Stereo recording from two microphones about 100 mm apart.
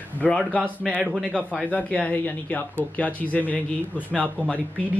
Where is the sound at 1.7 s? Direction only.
15° left (ahead or behind).